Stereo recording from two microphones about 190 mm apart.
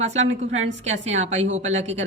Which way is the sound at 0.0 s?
35° right (ahead or behind).